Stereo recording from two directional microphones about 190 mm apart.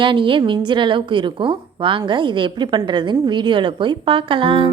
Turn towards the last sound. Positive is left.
turn(degrees=-25)  # may be behind; listen again after turning